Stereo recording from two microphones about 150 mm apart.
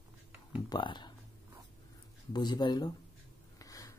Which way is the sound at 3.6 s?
20° left (ahead or behind).